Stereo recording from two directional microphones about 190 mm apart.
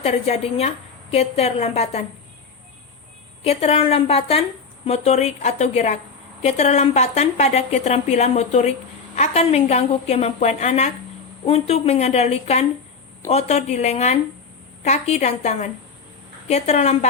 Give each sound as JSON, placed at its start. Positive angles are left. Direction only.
{"t": 0.0, "sound": "a woman's voice", "side_deg": 35}
{"t": 3.4, "sound": "a woman's voice", "side_deg": 35}